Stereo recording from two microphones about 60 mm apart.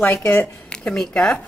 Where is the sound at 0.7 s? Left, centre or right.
Centre.